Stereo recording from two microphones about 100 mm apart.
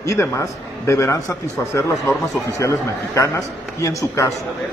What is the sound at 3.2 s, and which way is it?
A man's voice, 30° left (ahead or behind).